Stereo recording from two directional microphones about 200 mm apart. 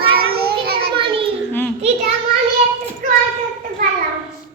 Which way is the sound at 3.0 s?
45° right (ahead or behind).